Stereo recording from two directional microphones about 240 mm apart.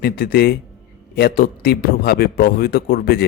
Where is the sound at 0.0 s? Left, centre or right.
Left.